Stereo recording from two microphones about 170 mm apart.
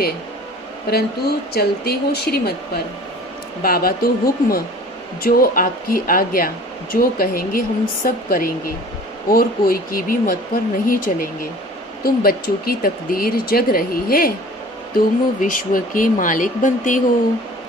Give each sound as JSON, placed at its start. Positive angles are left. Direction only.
{"t": 1.5, "sound": "speech", "side_deg": 70}
{"t": 3.6, "sound": "speech", "side_deg": 60}